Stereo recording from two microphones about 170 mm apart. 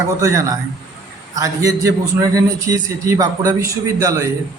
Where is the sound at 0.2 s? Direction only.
20° right (ahead or behind).